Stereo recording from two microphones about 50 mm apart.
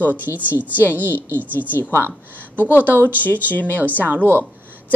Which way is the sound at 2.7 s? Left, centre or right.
Right.